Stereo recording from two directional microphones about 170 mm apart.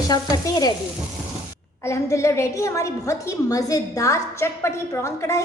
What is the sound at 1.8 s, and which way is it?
A woman's voice, 15° left (ahead or behind).